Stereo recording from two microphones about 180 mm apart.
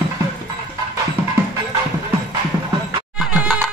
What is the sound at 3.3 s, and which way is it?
Music, 5° right (ahead or behind).